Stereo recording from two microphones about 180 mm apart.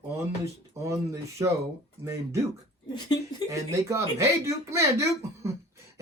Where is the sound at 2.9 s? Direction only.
25° left (ahead or behind).